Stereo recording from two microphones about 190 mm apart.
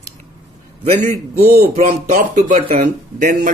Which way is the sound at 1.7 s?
40° right (ahead or behind).